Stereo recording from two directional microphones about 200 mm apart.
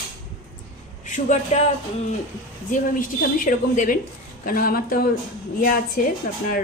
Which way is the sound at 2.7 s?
40° left (ahead or behind).